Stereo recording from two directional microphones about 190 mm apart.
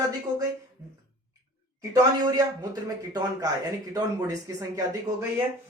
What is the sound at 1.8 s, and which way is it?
A man's voice, 20° right (ahead or behind).